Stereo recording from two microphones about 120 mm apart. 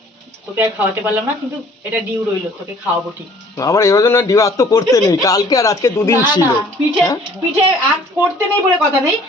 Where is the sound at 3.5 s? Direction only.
25° left (ahead or behind).